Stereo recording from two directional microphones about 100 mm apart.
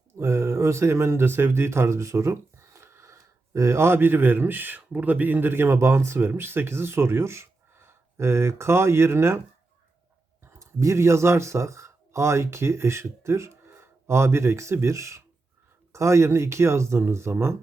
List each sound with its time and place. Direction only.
0.2 s speech: 30° right (ahead or behind)
10.4 s speech: 30° right (ahead or behind)